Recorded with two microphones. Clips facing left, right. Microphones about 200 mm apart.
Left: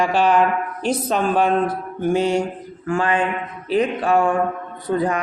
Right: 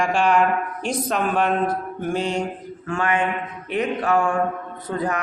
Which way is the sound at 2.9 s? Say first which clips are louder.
Left 2 dB; 30° left (ahead or behind).